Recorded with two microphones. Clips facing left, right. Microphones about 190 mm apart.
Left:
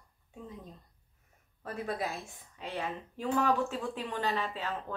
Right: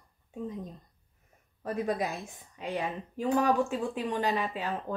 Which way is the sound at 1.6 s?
15° right (ahead or behind).